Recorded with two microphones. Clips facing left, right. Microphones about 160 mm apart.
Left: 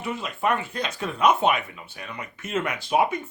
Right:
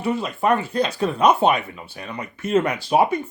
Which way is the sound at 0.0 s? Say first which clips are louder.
Right 5 dB; 35° right (ahead or behind).